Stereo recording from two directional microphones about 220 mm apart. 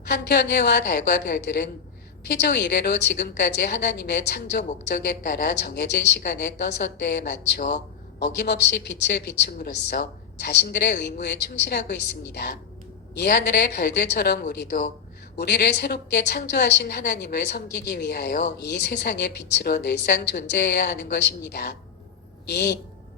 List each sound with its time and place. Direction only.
0.1 s a woman's voice: 50° left (ahead or behind)